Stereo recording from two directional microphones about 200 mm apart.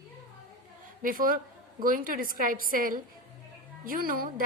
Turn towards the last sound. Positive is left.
turn(degrees=-45)  # may be behind; listen again after turning